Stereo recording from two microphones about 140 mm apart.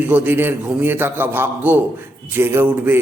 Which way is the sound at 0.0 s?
10° right (ahead or behind).